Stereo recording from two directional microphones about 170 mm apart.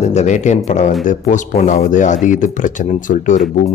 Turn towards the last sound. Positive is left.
turn(degrees=50)  # may be behind; listen again after turning